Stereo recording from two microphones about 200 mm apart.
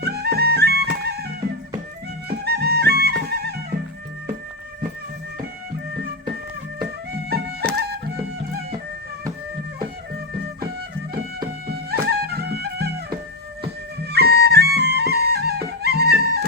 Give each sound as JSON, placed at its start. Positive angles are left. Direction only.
{"t": 0.0, "sound": "music", "side_deg": -55}
{"t": 2.4, "sound": "music", "side_deg": -55}
{"t": 7.1, "sound": "music", "side_deg": -55}
{"t": 11.7, "sound": "music", "side_deg": -50}
{"t": 14.0, "sound": "music", "side_deg": -55}